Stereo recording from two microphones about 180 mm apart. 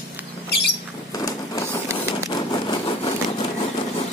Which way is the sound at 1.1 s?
20° left (ahead or behind).